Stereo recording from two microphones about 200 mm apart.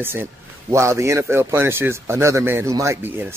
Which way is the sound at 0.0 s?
10° right (ahead or behind).